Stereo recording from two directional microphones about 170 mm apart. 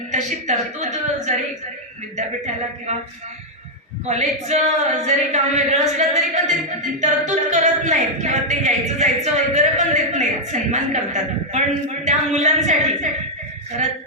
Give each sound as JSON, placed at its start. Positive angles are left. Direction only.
{"t": 0.1, "sound": "a woman's voice", "side_deg": -45}
{"t": 4.0, "sound": "a woman's voice", "side_deg": -40}